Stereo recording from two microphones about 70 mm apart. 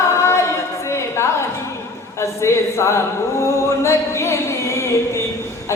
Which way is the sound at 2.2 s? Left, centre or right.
Left.